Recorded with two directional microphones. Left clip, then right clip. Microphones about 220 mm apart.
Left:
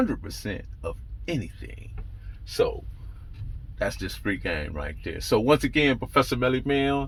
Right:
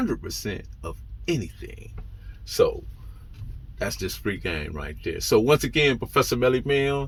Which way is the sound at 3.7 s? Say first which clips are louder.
Even; 15° right (ahead or behind).